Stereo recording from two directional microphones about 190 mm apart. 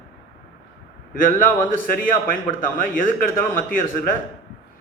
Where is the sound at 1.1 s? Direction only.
45° left (ahead or behind).